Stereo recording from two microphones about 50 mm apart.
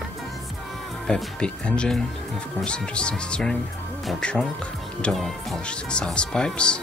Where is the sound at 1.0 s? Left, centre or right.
Centre.